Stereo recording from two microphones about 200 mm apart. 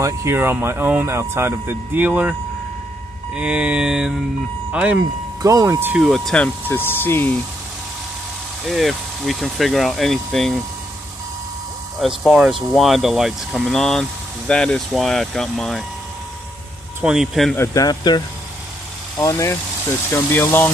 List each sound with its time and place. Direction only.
0.0 s speech: 15° right (ahead or behind)
3.3 s speech: 5° right (ahead or behind)
5.4 s speech: 20° right (ahead or behind); by 7.3 s 10° left (ahead or behind)
8.6 s speech: centre (ahead or behind)
12.0 s speech: centre (ahead or behind)
17.0 s speech: 5° right (ahead or behind)
17.6 s speech: 20° left (ahead or behind)